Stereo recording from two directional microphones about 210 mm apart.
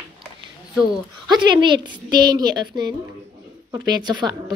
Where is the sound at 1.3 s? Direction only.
20° right (ahead or behind).